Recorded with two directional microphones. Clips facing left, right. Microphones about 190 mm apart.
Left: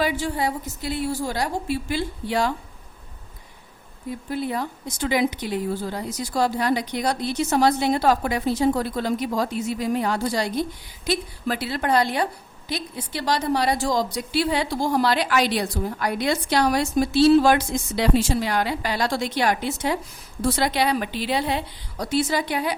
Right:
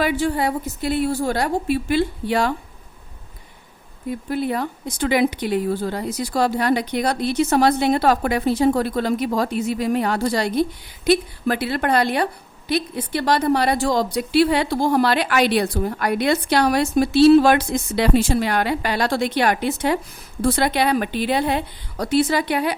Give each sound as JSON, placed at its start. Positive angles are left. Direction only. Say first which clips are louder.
{"t": 0.0, "sound": "a woman's voice", "louder": "right 4 dB", "side_deg": -60}
{"t": 4.3, "sound": "a woman's voice", "louder": "right 3 dB", "side_deg": -65}